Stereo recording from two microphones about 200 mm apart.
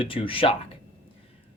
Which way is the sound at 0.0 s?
25° left (ahead or behind).